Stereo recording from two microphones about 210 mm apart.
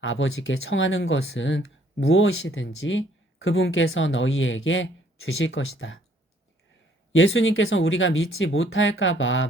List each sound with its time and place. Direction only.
0.0 s speech: 70° left (ahead or behind)
7.1 s speech: 70° left (ahead or behind)